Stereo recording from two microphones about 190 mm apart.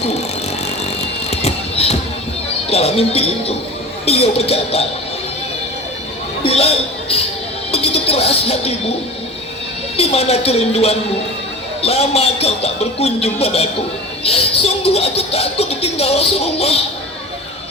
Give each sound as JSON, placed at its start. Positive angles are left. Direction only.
{"t": 0.9, "sound": "music", "side_deg": 35}
{"t": 2.6, "sound": "speech", "side_deg": 35}
{"t": 6.4, "sound": "speech", "side_deg": 30}
{"t": 10.0, "sound": "speech", "side_deg": 35}